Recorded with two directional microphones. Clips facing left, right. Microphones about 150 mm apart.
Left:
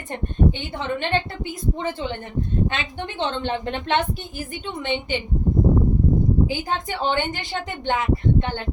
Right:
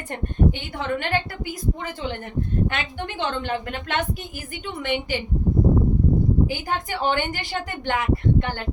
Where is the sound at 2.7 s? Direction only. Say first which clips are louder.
Even; 20° left (ahead or behind).